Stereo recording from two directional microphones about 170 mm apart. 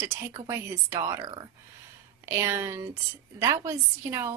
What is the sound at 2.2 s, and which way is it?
Speech, 15° right (ahead or behind).